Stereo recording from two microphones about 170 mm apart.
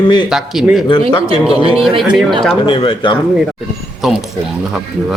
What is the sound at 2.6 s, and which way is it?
Speech, 30° left (ahead or behind).